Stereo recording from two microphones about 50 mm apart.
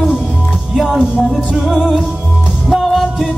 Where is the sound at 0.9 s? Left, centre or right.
Centre.